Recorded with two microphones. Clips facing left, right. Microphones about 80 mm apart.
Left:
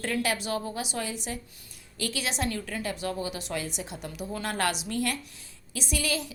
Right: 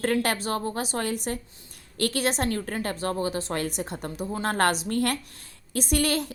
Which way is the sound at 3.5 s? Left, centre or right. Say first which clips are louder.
Right 4 dB; right.